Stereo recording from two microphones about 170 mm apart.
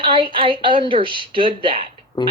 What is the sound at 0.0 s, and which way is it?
A woman's voice, 30° right (ahead or behind).